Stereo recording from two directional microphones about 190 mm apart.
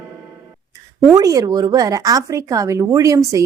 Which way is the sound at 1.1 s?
20° right (ahead or behind).